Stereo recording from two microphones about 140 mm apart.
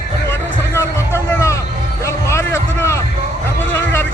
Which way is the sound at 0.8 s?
15° left (ahead or behind).